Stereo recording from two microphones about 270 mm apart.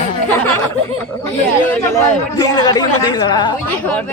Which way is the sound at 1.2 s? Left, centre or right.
Centre.